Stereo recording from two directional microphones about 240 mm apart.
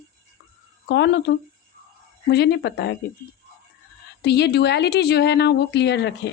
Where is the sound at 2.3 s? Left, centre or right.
Left.